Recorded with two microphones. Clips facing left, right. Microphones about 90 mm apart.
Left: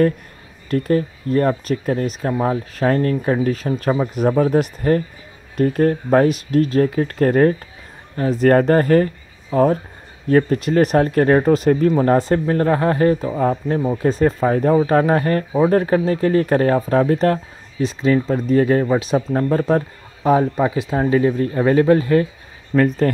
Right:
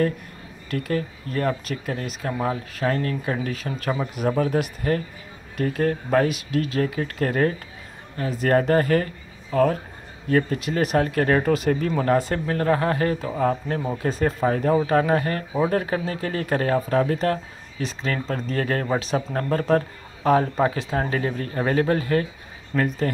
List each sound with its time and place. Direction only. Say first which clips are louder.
0.7 s speech: left 8 dB; 35° left (ahead or behind)
10.2 s speech: left 6 dB; 40° left (ahead or behind)
17.7 s speech: left 10 dB; 20° left (ahead or behind)
21.1 s speech: left 9 dB; 25° left (ahead or behind)
22.8 s speech: left 7 dB; 40° left (ahead or behind)